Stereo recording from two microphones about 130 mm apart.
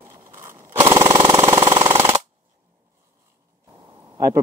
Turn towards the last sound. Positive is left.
turn(degrees=-20)  # may be behind; listen again after turning